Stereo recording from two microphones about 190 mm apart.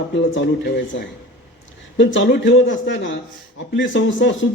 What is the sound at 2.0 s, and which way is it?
Speech, 65° left (ahead or behind).